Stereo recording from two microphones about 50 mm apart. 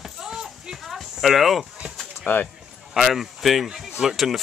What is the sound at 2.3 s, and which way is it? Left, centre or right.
Speech, left.